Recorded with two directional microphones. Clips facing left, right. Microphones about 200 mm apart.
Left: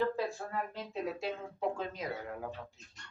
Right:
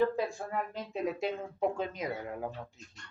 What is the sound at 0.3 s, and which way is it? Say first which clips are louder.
Speech: right 2 dB; 15° right (ahead or behind).